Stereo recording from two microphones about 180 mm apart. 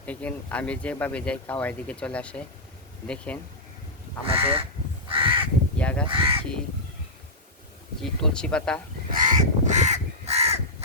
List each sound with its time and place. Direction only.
0.0 s speech: 10° left (ahead or behind)
4.3 s crow: 30° right (ahead or behind)
5.7 s speech: 5° left (ahead or behind)
6.1 s speech: 30° right (ahead or behind)
8.0 s speech: 5° left (ahead or behind)
9.1 s crow: 45° right (ahead or behind)